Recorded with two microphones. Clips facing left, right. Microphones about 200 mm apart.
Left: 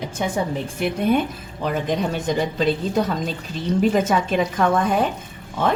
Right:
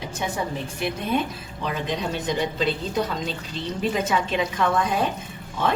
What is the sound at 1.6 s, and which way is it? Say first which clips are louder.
A woman's voice: left 5 dB; 50° left (ahead or behind).